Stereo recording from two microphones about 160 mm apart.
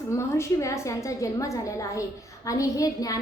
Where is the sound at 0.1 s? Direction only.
15° left (ahead or behind).